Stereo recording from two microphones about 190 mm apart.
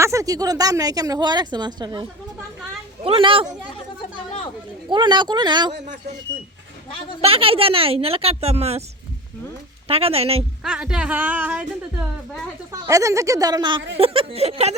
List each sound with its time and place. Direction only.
0.0 s a woman's voice: 15° right (ahead or behind)
4.9 s a woman's voice: 25° right (ahead or behind)
7.2 s a woman's voice: 30° right (ahead or behind)
9.8 s a woman's voice: 30° right (ahead or behind)
10.6 s speech: 5° right (ahead or behind)
12.7 s a woman's voice: 15° right (ahead or behind); by 14.8 s 35° right (ahead or behind)